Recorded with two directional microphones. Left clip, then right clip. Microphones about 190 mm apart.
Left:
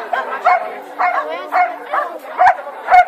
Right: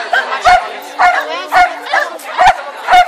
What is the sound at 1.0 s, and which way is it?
Bow-wow, 45° right (ahead or behind).